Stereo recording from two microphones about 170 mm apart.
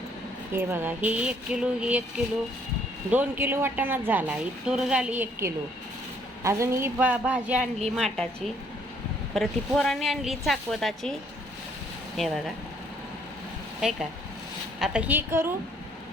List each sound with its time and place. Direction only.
0.5 s speech: 10° right (ahead or behind)
3.1 s speech: 10° right (ahead or behind)
7.6 s a woman's voice: 40° right (ahead or behind)
7.9 s a woman's voice: 5° left (ahead or behind)
9.3 s a woman's voice: centre (ahead or behind)
12.1 s speech: centre (ahead or behind)
13.8 s a woman's voice: 5° right (ahead or behind)